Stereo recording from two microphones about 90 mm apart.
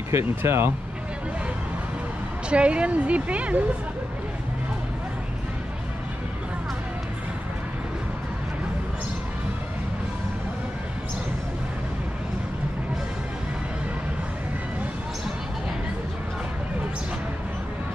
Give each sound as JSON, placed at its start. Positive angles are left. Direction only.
{"t": 0.4, "sound": "speech", "side_deg": -25}
{"t": 2.5, "sound": "speech", "side_deg": -10}